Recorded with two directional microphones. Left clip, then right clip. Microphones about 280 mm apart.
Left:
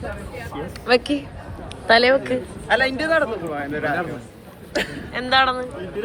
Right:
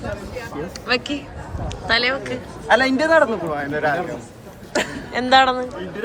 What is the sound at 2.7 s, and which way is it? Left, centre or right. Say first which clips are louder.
A man's voice: right 4 dB; right.